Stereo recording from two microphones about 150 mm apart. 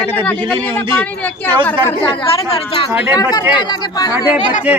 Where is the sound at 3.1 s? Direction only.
25° left (ahead or behind).